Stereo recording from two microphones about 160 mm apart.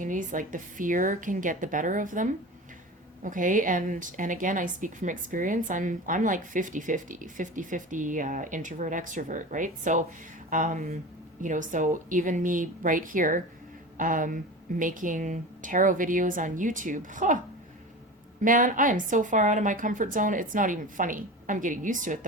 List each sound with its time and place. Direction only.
0.0 s a woman's voice: 55° right (ahead or behind)
18.4 s a woman's voice: 55° right (ahead or behind)